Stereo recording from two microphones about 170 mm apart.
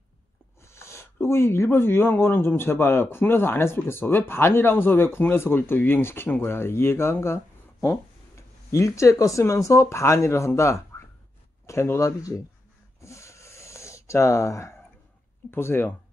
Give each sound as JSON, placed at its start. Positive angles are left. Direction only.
{"t": 0.6, "sound": "speech", "side_deg": 15}
{"t": 13.0, "sound": "a sound", "side_deg": 15}
{"t": 15.5, "sound": "speech", "side_deg": 15}